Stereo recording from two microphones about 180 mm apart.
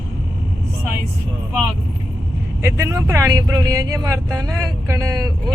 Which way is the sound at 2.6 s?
15° right (ahead or behind).